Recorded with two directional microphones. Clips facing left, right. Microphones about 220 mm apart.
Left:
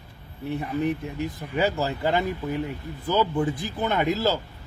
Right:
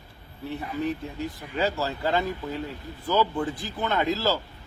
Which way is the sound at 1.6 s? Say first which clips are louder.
Left 2 dB; 15° left (ahead or behind).